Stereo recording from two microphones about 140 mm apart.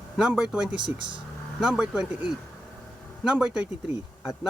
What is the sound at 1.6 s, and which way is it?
Speech, 5° right (ahead or behind).